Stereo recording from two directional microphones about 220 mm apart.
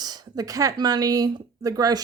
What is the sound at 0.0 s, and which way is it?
Speech, 15° right (ahead or behind).